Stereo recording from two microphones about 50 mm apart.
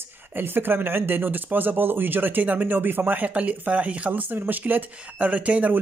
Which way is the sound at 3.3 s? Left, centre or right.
Right.